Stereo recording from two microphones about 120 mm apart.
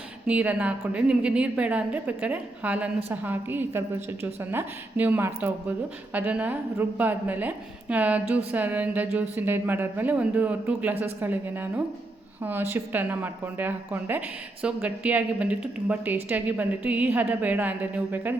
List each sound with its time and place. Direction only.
0.3 s a woman's voice: 10° right (ahead or behind)